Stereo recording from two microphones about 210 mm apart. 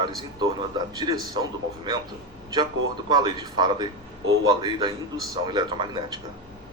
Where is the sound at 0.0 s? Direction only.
20° right (ahead or behind).